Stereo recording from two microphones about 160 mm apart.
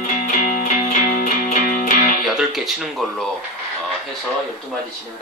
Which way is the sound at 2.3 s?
Centre (ahead or behind).